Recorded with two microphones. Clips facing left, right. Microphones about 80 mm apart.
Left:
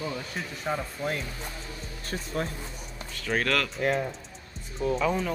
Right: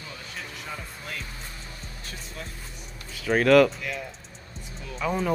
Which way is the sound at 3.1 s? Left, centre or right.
Centre.